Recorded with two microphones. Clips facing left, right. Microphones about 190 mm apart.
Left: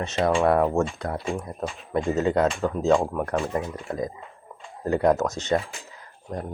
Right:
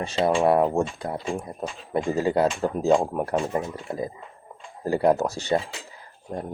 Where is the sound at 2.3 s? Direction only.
10° right (ahead or behind).